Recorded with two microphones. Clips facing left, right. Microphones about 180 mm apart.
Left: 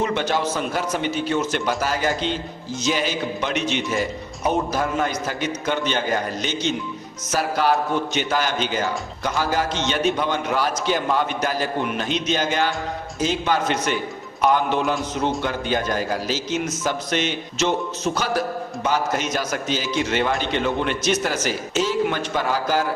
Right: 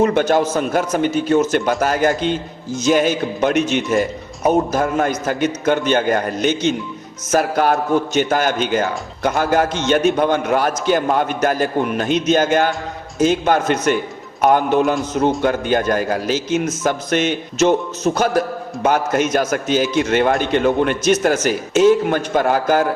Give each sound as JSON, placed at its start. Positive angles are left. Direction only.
{"t": 0.0, "sound": "a man's voice", "side_deg": -50}